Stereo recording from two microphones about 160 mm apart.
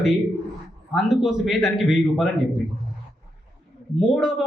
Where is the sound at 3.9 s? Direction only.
5° right (ahead or behind).